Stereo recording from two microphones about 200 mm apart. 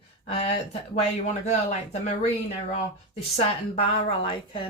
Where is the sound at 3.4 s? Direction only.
30° left (ahead or behind).